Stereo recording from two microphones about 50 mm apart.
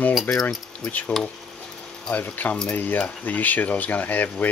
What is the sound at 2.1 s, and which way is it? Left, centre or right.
Speech, left.